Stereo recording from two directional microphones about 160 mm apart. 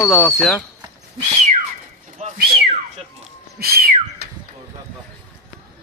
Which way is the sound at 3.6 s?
75° right (ahead or behind).